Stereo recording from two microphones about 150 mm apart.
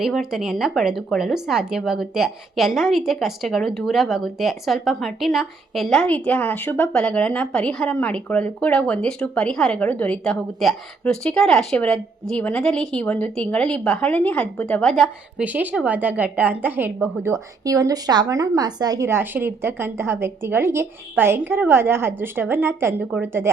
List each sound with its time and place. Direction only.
0.0 s a woman's voice: centre (ahead or behind)